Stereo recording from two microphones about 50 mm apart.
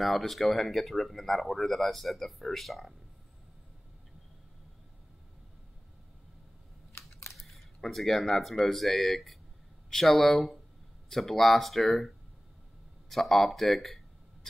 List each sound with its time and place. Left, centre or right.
0.0 s speech: centre
6.9 s camera: left
7.3 s speech: centre
13.1 s speech: centre